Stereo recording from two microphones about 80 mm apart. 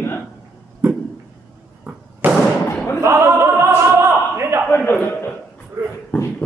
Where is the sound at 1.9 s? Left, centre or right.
Centre.